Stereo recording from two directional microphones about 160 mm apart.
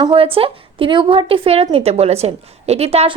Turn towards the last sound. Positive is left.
turn(degrees=-40)  # may be behind; listen again after turning